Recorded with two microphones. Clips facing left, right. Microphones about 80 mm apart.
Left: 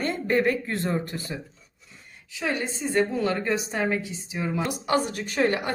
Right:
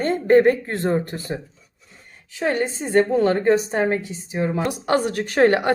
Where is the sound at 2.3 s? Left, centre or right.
Right.